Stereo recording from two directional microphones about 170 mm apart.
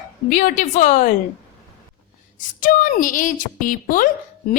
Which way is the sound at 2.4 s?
50° left (ahead or behind).